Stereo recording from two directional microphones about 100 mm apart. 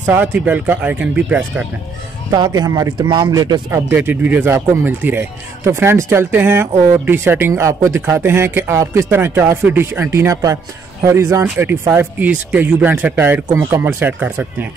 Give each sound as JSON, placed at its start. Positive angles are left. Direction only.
{"t": 0.0, "sound": "speech", "side_deg": -15}
{"t": 2.3, "sound": "speech", "side_deg": -40}
{"t": 3.7, "sound": "speech", "side_deg": -20}
{"t": 11.4, "sound": "speech", "side_deg": -20}